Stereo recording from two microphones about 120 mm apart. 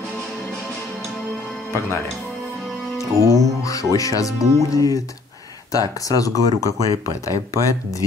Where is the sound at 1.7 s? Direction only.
20° left (ahead or behind).